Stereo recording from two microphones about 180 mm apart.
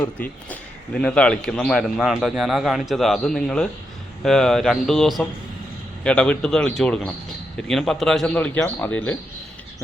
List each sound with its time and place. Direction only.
0.0 s a man's voice: 10° left (ahead or behind)